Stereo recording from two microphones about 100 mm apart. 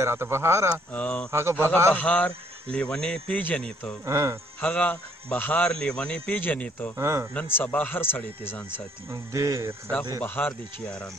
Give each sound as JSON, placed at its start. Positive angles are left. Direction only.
{"t": 0.0, "sound": "speech", "side_deg": -25}
{"t": 0.9, "sound": "speech", "side_deg": 10}
{"t": 1.3, "sound": "speech", "side_deg": -25}
{"t": 2.0, "sound": "speech", "side_deg": 15}
{"t": 4.0, "sound": "speech", "side_deg": -30}
{"t": 4.6, "sound": "speech", "side_deg": 10}
{"t": 7.0, "sound": "speech", "side_deg": -30}
{"t": 7.4, "sound": "speech", "side_deg": 20}
{"t": 9.1, "sound": "speech", "side_deg": -30}
{"t": 10.2, "sound": "speech", "side_deg": 15}